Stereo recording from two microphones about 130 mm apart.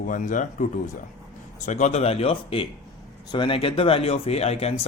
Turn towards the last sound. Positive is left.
turn(degrees=50)  # may be behind; listen again after turning